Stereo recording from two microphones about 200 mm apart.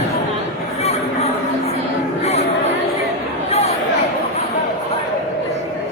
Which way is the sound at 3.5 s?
30° left (ahead or behind).